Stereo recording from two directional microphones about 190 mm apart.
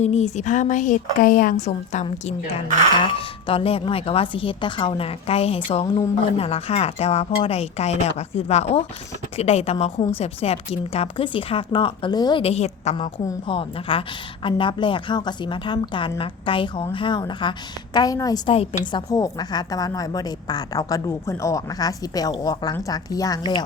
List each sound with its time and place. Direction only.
0.0 s speech: 35° left (ahead or behind)
1.6 s a woman's voice: 40° left (ahead or behind); by 23.6 s 20° left (ahead or behind)